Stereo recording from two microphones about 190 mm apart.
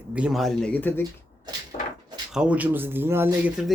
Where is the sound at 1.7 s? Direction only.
30° left (ahead or behind).